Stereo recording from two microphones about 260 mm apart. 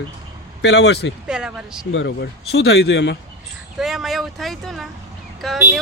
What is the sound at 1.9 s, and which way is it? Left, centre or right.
Speech, left.